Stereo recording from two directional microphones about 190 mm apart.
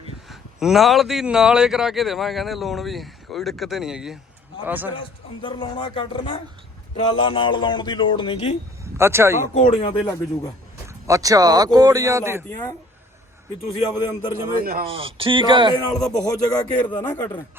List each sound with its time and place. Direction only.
0.3 s speech: centre (ahead or behind)
4.9 s a man's voice: 25° left (ahead or behind)
8.8 s speech: 15° right (ahead or behind)
9.6 s a man's voice: 30° left (ahead or behind)
10.8 s speech: 15° right (ahead or behind)
13.8 s a man's voice: 20° left (ahead or behind)
14.5 s speech: 50° right (ahead or behind)
14.8 s speech: 30° right (ahead or behind)
16.2 s a man's voice: 20° left (ahead or behind)
16.8 s a man's voice: 10° left (ahead or behind)